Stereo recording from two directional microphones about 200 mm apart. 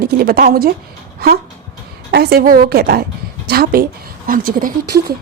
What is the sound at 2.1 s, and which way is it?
A woman's voice, 50° right (ahead or behind).